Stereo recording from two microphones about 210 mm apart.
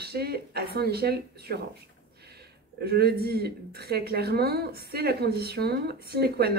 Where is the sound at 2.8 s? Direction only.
50° right (ahead or behind).